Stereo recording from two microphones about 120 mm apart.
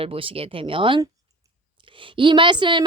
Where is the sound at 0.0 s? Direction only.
50° right (ahead or behind).